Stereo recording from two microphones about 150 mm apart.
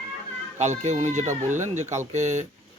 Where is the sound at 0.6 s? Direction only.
50° right (ahead or behind).